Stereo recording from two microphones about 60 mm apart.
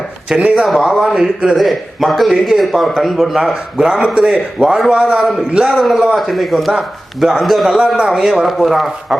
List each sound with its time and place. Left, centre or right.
0.3 s speech: centre
0.7 s speech: centre
1.5 s a man's voice: centre
5.6 s a man's voice: centre
7.9 s a man's voice: centre